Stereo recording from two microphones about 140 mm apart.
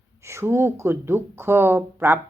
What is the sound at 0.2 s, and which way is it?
Speech, 20° right (ahead or behind).